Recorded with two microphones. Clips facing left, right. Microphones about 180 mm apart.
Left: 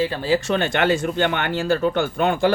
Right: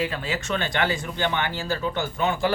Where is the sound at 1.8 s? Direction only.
60° left (ahead or behind).